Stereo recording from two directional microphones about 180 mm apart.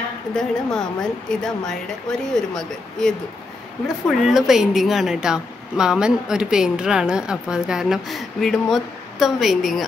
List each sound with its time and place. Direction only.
0.3 s speech: 5° left (ahead or behind)